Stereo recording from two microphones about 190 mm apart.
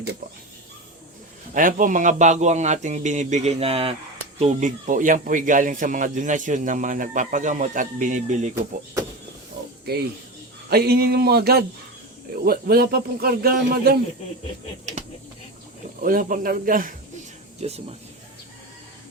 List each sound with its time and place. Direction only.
1.5 s speech: 45° right (ahead or behind)
10.7 s speech: 55° right (ahead or behind)
16.0 s speech: 45° right (ahead or behind)
17.6 s speech: 35° right (ahead or behind)